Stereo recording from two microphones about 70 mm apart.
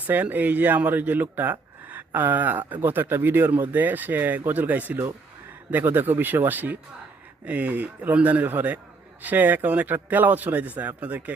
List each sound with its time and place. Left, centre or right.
0.1 s speech: right